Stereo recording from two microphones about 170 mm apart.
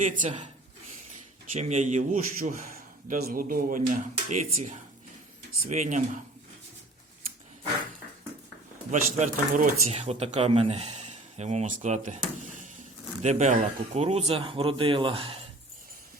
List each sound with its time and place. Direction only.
0.0 s a man's voice: 50° right (ahead or behind)
1.5 s a man's voice: 40° right (ahead or behind)
8.9 s speech: 45° right (ahead or behind)